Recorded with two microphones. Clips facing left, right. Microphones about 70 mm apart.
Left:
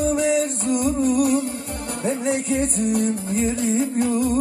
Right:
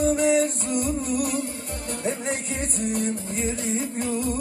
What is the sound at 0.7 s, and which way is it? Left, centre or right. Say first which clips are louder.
Music: left 6 dB; left.